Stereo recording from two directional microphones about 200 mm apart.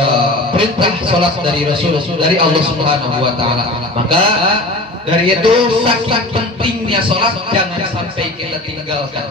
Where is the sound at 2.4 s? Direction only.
25° right (ahead or behind).